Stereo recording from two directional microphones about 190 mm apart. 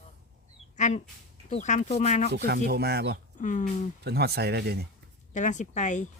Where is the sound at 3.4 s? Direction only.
40° left (ahead or behind).